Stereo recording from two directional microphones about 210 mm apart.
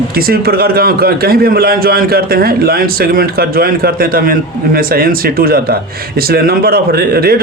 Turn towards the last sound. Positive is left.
turn(degrees=-45)  # may be behind; listen again after turning